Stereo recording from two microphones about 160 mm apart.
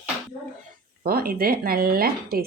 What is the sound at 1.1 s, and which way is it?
A woman's voice, 65° right (ahead or behind).